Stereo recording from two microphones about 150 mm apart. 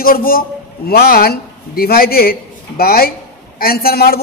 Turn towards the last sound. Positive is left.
turn(degrees=90)